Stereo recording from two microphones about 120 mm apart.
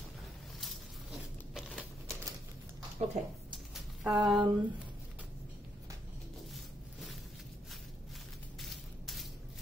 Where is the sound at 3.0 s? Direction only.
75° right (ahead or behind).